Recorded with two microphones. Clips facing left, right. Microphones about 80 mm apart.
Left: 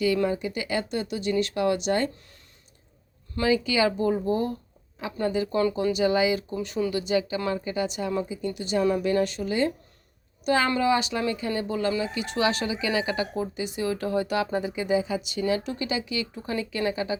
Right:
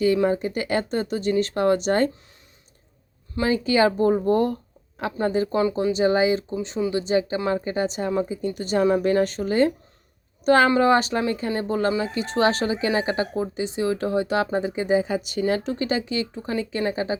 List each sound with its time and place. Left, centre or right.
0.3 s speech: right
3.4 s speech: right
4.3 s speech: right
5.2 s speech: right
6.5 s speech: right
6.9 s speech: right
15.6 s speech: right